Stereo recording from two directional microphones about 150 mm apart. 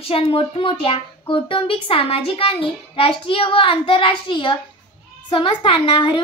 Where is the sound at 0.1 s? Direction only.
40° left (ahead or behind).